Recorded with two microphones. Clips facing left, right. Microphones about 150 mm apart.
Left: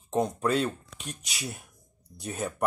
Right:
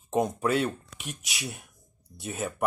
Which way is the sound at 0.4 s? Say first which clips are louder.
Even; 5° right (ahead or behind).